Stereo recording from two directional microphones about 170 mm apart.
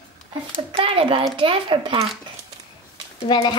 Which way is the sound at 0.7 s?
35° right (ahead or behind).